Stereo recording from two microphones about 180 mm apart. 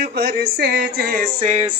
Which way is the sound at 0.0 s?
65° right (ahead or behind).